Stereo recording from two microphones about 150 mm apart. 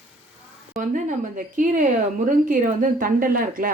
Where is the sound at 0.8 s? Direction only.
60° right (ahead or behind).